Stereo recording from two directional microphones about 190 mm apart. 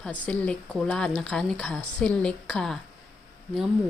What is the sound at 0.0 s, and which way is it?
Speech, 5° left (ahead or behind).